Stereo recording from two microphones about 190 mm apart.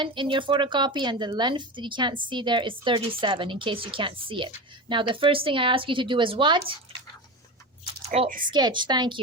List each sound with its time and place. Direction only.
0.0 s speech: 25° right (ahead or behind)
7.9 s speech: 30° right (ahead or behind)